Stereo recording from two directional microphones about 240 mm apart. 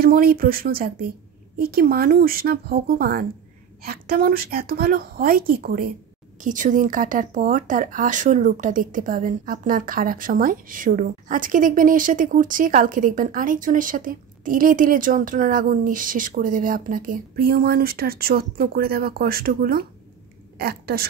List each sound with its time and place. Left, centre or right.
0.0 s a woman's voice: right